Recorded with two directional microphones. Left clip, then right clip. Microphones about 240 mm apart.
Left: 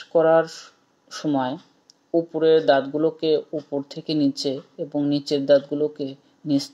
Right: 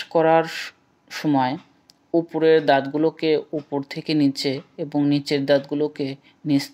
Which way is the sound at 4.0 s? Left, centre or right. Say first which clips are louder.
Right 2 dB; right.